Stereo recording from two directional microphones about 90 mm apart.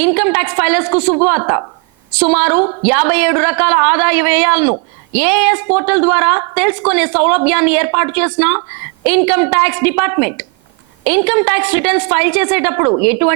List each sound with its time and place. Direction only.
0.0 s a woman's voice: 25° right (ahead or behind)
1.4 s speech: 35° right (ahead or behind)
2.1 s a woman's voice: 20° right (ahead or behind)